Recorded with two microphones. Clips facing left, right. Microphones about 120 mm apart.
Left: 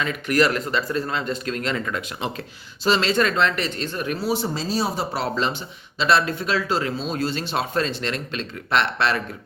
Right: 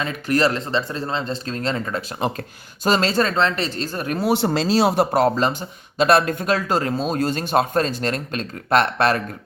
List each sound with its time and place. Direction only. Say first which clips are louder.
0.0 s speech: right 1 dB; 35° right (ahead or behind)
4.2 s speech: right 8 dB; 65° right (ahead or behind)
5.1 s speech: right 6 dB; 45° right (ahead or behind)